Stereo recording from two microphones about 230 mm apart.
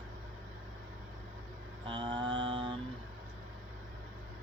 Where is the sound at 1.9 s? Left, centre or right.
Centre.